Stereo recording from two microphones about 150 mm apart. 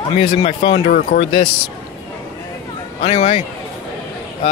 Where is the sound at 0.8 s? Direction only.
65° left (ahead or behind).